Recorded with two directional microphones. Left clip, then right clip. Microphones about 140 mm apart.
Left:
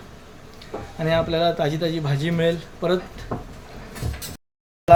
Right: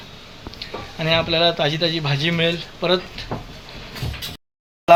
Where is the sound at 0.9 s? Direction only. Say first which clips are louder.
Right 2 dB; 15° left (ahead or behind).